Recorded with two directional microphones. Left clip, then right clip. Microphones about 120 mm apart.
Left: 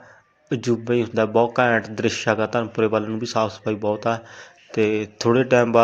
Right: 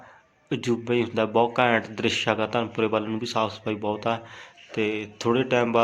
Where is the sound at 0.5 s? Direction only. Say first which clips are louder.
Left 3 dB; 25° left (ahead or behind).